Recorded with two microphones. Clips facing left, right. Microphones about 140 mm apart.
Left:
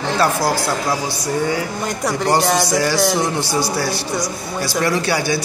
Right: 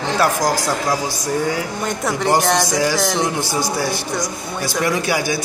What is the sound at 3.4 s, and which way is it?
Speech, 45° right (ahead or behind).